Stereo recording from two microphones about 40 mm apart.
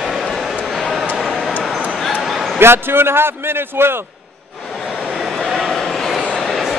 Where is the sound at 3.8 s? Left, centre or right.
Right.